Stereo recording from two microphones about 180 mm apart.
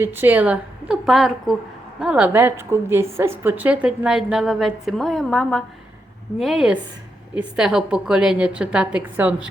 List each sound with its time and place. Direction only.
0.0 s a woman's voice: 10° right (ahead or behind)